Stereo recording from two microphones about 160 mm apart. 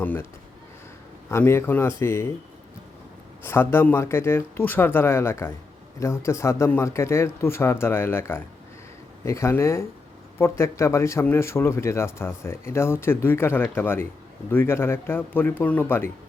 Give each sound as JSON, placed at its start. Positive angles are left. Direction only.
{"t": 0.0, "sound": "speech", "side_deg": 10}
{"t": 1.3, "sound": "speech", "side_deg": 15}
{"t": 3.4, "sound": "speech", "side_deg": 15}